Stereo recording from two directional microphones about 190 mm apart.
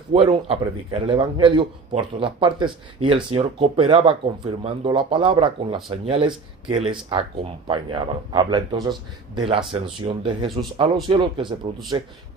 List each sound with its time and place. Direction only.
0.1 s speech: 30° right (ahead or behind)